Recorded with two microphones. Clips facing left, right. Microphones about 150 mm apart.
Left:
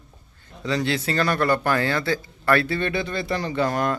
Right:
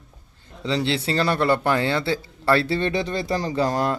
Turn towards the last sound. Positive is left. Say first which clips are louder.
# right 1 dB
turn(degrees=-30)  # may be behind; listen again after turning